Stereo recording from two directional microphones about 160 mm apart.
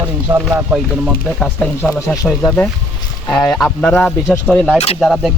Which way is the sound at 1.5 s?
15° left (ahead or behind).